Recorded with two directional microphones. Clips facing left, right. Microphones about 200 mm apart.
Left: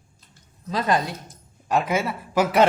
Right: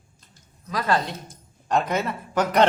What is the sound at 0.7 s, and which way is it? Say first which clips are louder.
Speech: left 1 dB; 20° left (ahead or behind).